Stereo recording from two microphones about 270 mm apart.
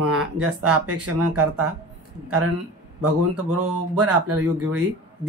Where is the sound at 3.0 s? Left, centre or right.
Right.